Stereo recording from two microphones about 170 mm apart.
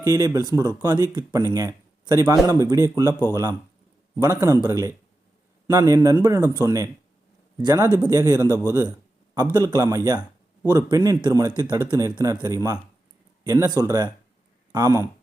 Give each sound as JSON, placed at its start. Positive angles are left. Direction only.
{"t": 0.0, "sound": "a man's voice", "side_deg": -20}